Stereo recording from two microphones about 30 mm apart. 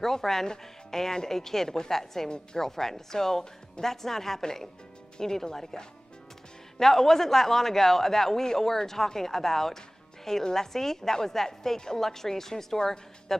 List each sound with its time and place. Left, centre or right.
0.0 s a man's voice: centre
2.2 s a woman's voice: left
2.6 s a man's voice: centre
6.8 s a man's voice: centre